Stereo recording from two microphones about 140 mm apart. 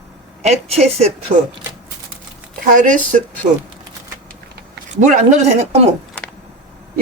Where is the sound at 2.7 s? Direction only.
65° right (ahead or behind).